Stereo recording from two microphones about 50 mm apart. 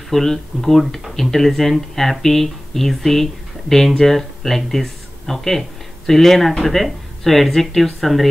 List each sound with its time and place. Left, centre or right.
0.1 s speech: centre